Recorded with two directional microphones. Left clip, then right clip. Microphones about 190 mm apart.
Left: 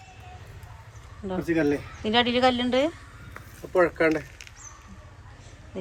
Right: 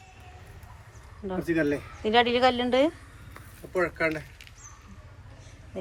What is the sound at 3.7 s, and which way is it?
Speech, 40° left (ahead or behind).